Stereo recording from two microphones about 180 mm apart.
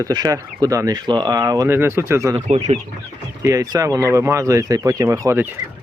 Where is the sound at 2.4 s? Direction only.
40° right (ahead or behind).